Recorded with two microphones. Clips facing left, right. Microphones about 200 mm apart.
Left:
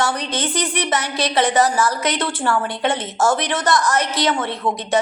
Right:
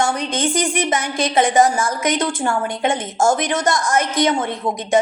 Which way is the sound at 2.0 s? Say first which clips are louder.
Right 2 dB; 45° right (ahead or behind).